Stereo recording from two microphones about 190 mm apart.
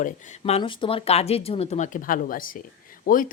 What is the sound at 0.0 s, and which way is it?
Speech, 35° left (ahead or behind).